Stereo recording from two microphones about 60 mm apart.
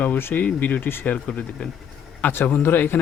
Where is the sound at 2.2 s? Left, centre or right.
Left.